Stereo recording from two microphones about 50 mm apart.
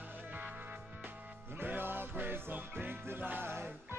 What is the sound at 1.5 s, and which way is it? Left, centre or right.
Music, right.